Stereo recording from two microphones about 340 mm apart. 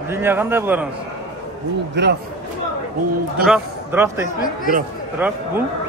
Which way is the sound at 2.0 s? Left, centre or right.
Right.